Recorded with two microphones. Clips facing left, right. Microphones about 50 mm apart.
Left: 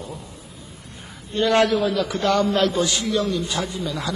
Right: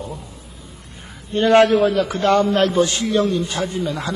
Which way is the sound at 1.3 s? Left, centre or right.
Right.